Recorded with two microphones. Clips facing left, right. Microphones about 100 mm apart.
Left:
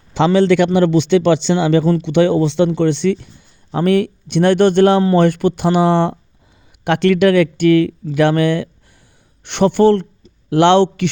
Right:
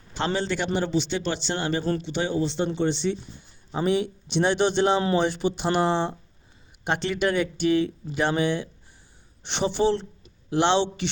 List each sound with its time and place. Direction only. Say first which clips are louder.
0.1 s a man's voice: left 14 dB; 90° left; by 10.8 s 60° left (ahead or behind)